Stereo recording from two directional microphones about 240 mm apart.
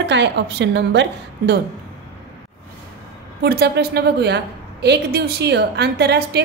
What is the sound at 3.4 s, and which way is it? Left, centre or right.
A woman's voice, right.